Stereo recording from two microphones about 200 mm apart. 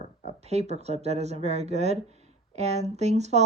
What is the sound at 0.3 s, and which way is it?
Speech, 35° right (ahead or behind).